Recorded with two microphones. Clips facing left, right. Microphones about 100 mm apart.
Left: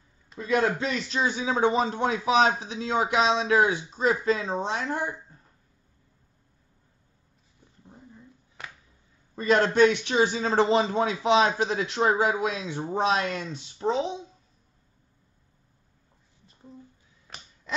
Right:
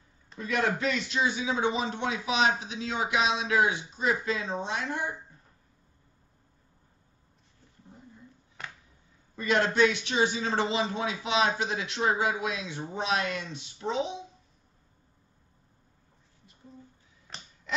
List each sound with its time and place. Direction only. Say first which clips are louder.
0.4 s speech: left 4 dB; 30° left (ahead or behind)
9.3 s speech: left 4 dB; 35° left (ahead or behind)